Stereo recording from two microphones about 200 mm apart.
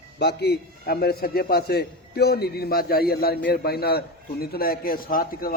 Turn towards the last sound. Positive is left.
turn(degrees=45)  # may be behind; listen again after turning